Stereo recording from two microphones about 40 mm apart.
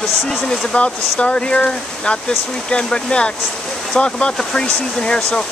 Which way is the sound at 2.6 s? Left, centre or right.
Left.